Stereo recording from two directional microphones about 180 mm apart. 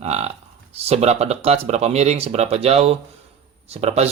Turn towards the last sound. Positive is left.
turn(degrees=-35)  # may be behind; listen again after turning